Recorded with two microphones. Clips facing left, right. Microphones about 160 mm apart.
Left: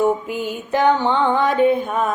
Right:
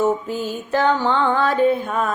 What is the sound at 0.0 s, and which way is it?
Mantra, 15° left (ahead or behind).